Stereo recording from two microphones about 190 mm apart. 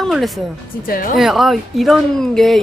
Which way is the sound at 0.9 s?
50° left (ahead or behind).